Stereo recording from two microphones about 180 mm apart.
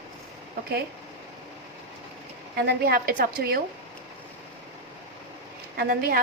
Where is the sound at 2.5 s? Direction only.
60° right (ahead or behind).